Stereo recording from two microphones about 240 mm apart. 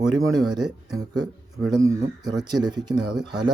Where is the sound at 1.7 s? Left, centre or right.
Centre.